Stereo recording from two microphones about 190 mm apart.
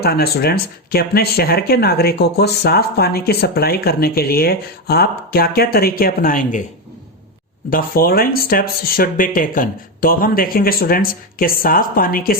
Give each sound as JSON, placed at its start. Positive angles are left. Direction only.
{"t": 0.0, "sound": "speech", "side_deg": 55}
{"t": 7.7, "sound": "speech", "side_deg": 50}